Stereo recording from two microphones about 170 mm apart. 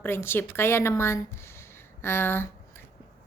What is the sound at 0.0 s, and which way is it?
A woman's voice, 15° left (ahead or behind).